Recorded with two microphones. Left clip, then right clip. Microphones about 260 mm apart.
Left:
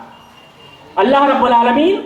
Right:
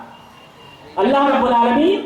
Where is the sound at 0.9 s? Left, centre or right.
Left.